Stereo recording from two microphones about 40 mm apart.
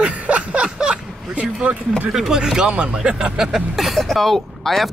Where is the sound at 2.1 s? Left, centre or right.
Centre.